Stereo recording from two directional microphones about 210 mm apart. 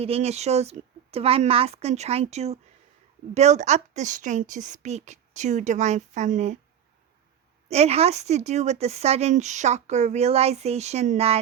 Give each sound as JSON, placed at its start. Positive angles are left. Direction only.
{"t": 0.0, "sound": "a woman's voice", "side_deg": -30}
{"t": 7.7, "sound": "a woman's voice", "side_deg": -30}